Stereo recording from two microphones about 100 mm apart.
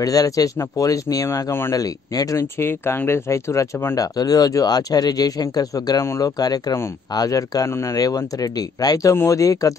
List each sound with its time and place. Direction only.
0.0 s speech: 35° left (ahead or behind)
2.6 s speech: 25° left (ahead or behind)